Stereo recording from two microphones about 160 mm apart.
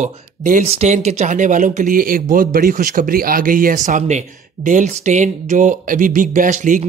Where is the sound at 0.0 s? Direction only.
50° right (ahead or behind).